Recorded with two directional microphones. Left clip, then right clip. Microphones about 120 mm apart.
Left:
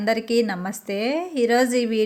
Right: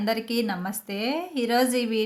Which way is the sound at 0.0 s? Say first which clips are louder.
Left 6 dB; 30° left (ahead or behind).